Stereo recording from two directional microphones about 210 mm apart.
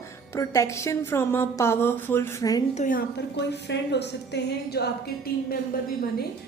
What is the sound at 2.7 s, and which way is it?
A woman's voice, 40° left (ahead or behind).